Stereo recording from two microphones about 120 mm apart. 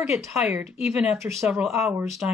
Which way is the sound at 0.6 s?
10° right (ahead or behind).